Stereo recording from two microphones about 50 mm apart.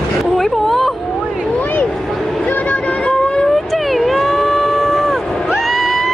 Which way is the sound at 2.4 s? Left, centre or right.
Left.